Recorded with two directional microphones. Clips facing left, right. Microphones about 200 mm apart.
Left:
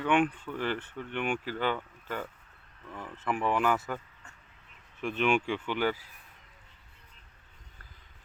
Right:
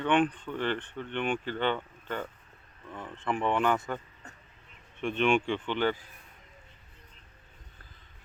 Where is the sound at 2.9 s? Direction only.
5° left (ahead or behind).